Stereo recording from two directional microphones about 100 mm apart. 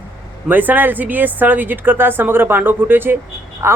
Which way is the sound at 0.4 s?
20° right (ahead or behind).